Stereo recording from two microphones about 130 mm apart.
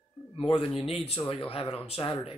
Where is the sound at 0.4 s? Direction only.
45° left (ahead or behind).